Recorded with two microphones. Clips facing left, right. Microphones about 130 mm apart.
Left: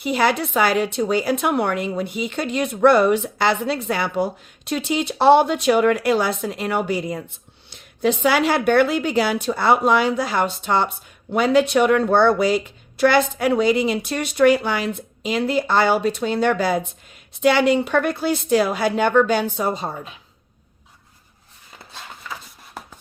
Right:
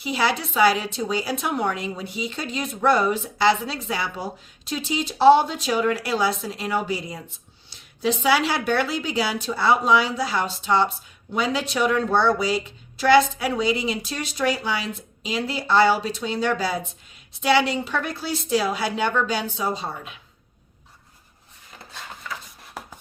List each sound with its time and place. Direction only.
0.0 s a woman's voice: 50° left (ahead or behind)